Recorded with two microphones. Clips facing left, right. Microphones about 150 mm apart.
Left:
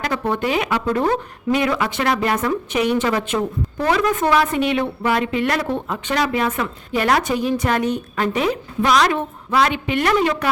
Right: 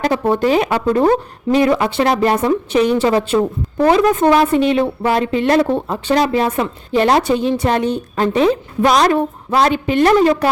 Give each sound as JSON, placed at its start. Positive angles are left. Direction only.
{"t": 0.0, "sound": "a woman's voice", "side_deg": -35}